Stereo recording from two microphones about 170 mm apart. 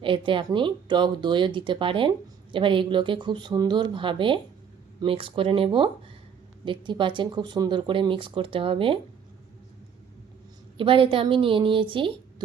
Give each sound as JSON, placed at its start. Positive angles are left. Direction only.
{"t": 0.0, "sound": "a woman's voice", "side_deg": -30}
{"t": 10.8, "sound": "a woman's voice", "side_deg": -30}